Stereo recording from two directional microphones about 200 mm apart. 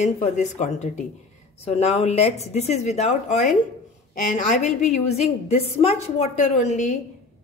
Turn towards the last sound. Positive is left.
turn(degrees=35)  # may be behind; listen again after turning